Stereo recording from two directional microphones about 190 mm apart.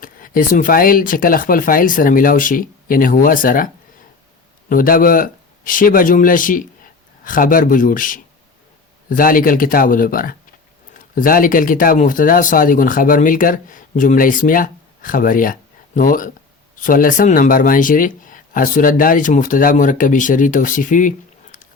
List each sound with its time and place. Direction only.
0.0 s speech: 45° left (ahead or behind)
4.7 s speech: 45° left (ahead or behind)